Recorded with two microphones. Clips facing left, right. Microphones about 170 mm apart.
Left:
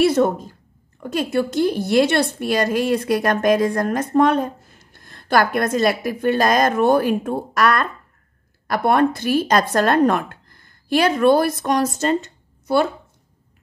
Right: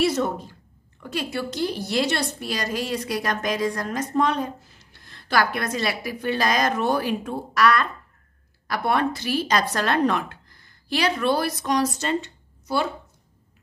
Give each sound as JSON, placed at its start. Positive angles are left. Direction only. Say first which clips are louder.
{"t": 0.0, "sound": "a woman's voice", "louder": "left 6 dB", "side_deg": 55}